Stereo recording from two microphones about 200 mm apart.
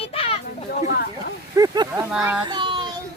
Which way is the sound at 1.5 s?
20° right (ahead or behind).